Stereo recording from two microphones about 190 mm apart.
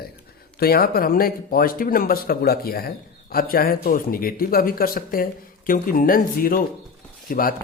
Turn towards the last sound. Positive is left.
turn(degrees=50)  # may be behind; listen again after turning